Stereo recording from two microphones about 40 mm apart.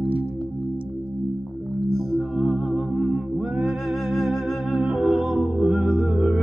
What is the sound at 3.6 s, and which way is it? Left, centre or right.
Music, centre.